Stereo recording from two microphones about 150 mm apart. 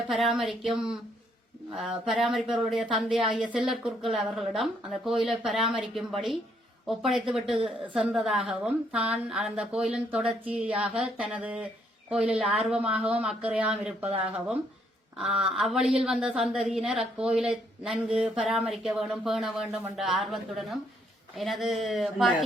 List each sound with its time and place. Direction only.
0.1 s a woman's voice: centre (ahead or behind)
14.0 s speech: 40° right (ahead or behind)
14.3 s a woman's voice: 5° right (ahead or behind)